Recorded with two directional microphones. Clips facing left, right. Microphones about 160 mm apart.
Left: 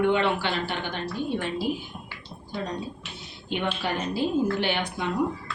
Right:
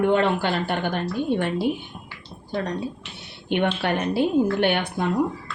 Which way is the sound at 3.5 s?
65° right (ahead or behind).